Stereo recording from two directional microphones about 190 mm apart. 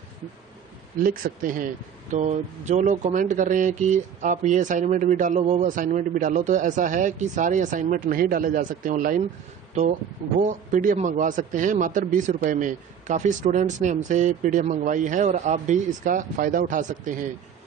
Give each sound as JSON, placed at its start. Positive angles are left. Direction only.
{"t": 1.0, "sound": "a man's voice", "side_deg": -45}
{"t": 10.4, "sound": "a man's voice", "side_deg": -45}